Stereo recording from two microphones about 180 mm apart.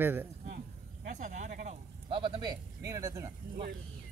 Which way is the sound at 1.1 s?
45° right (ahead or behind).